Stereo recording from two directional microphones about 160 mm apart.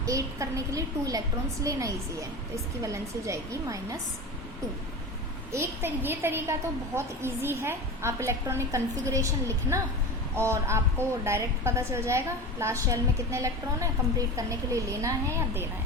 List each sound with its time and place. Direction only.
0.0 s a woman's voice: 20° right (ahead or behind)
5.5 s a woman's voice: 15° right (ahead or behind)